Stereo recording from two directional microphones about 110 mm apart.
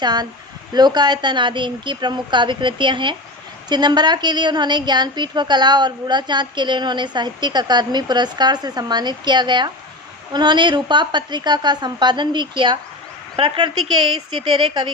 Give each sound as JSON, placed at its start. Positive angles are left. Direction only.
{"t": 0.0, "sound": "a woman's voice", "side_deg": -40}